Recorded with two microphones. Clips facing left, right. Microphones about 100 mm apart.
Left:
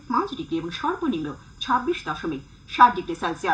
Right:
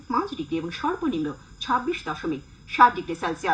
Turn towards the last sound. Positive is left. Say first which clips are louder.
# left 1 dB
turn(degrees=0)  # may be behind; listen again after turning